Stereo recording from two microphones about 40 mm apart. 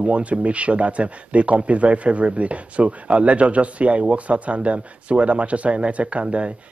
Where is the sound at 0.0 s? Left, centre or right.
Right.